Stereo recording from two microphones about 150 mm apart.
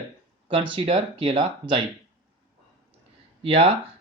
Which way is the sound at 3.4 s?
40° right (ahead or behind).